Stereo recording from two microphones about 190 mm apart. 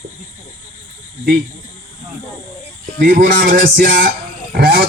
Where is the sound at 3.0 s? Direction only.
45° right (ahead or behind).